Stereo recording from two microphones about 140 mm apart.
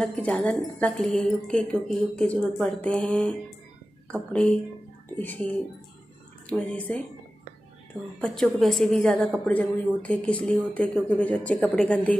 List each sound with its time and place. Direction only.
0.0 s speech: 10° left (ahead or behind)
6.6 s speech: 10° left (ahead or behind)
8.2 s speech: centre (ahead or behind)